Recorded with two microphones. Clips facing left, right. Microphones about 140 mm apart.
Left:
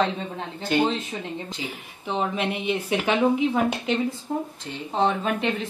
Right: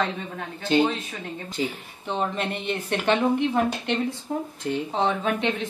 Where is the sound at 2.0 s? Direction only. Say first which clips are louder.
Left 1 dB; 5° left (ahead or behind).